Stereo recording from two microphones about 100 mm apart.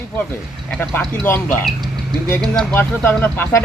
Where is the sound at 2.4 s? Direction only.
5° left (ahead or behind).